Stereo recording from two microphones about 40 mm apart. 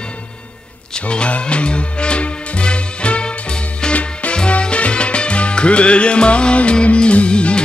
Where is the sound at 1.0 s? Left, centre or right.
Left.